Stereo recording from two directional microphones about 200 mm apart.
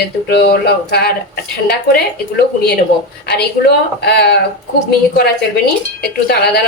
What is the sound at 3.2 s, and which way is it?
Speech, 55° left (ahead or behind).